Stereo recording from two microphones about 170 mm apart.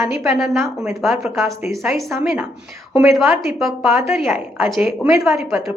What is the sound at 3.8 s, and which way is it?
Speech, 15° right (ahead or behind).